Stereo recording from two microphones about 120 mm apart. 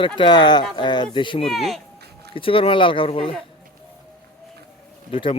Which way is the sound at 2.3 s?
50° left (ahead or behind).